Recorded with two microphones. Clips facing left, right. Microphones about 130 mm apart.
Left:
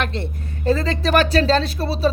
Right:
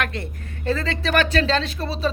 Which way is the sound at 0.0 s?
30° left (ahead or behind).